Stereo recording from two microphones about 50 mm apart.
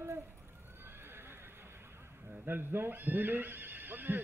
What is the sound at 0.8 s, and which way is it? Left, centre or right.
Horse, right.